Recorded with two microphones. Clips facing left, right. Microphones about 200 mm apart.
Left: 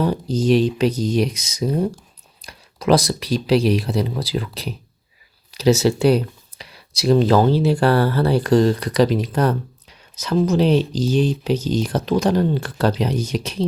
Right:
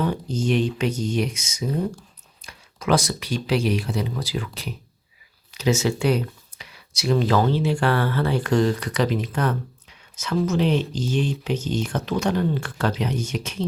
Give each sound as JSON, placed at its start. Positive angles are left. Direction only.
{"t": 0.0, "sound": "speech", "side_deg": 35}